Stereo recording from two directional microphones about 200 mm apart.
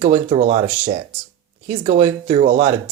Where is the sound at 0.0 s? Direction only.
30° right (ahead or behind).